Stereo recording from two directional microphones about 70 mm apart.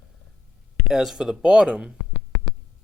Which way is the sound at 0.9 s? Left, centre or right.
Centre.